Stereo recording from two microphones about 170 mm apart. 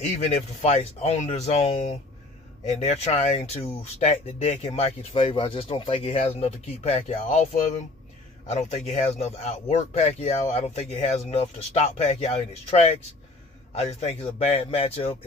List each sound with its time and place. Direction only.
0.2 s speech: 40° left (ahead or behind)
8.5 s speech: 40° left (ahead or behind)